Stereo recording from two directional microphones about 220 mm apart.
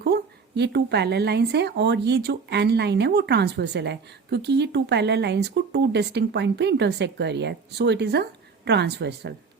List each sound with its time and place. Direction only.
0.0 s speech: 50° right (ahead or behind)